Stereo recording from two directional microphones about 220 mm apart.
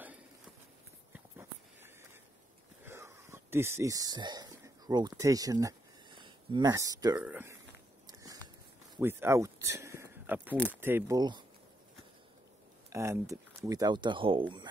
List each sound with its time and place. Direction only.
1.3 s a sound: 10° right (ahead or behind)
7.2 s speech: 10° right (ahead or behind)
8.1 s biting: 15° right (ahead or behind)
8.9 s speech: 10° right (ahead or behind)
12.9 s speech: 15° right (ahead or behind)